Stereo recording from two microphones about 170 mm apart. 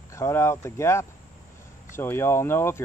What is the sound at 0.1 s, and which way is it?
Speech, 15° left (ahead or behind).